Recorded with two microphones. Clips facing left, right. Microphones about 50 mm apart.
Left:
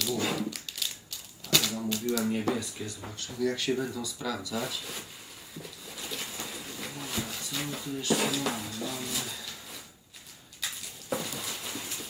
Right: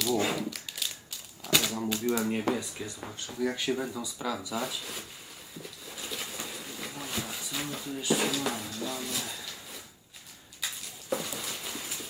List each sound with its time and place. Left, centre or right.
0.3 s crumpling: centre
1.5 s typewriter: centre
1.8 s speech: right
4.5 s speech: centre
5.9 s pigeon: centre
10.6 s a sound: centre